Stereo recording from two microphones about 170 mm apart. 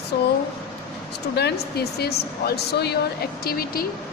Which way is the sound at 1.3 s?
70° left (ahead or behind).